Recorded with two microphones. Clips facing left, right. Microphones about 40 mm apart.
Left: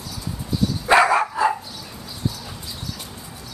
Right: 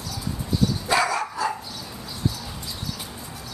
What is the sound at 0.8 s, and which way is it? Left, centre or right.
Dog, left.